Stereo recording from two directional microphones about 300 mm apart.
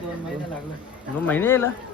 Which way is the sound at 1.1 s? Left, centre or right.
Centre.